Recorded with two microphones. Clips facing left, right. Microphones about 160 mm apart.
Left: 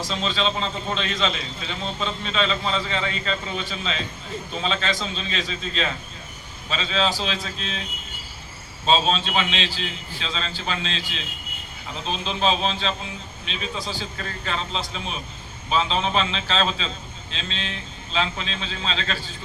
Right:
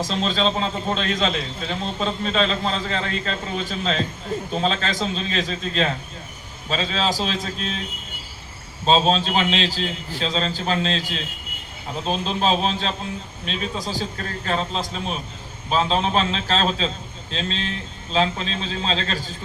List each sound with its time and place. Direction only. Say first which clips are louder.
0.1 s a man's voice: right 1 dB; 40° right (ahead or behind)
8.9 s a man's voice: right 3 dB; 40° right (ahead or behind)